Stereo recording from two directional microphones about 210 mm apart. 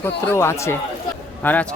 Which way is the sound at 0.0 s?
10° left (ahead or behind).